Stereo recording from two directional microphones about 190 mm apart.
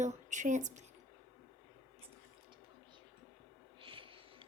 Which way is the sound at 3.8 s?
25° right (ahead or behind).